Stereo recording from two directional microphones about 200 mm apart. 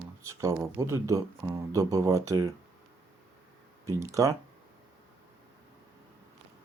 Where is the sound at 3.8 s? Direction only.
15° right (ahead or behind).